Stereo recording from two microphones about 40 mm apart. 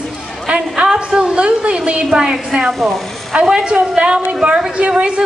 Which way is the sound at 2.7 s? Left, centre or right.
Centre.